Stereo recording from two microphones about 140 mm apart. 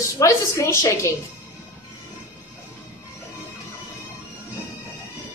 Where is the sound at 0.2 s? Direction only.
20° left (ahead or behind).